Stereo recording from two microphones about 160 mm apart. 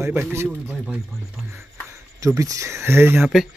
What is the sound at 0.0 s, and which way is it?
Speech, 10° right (ahead or behind).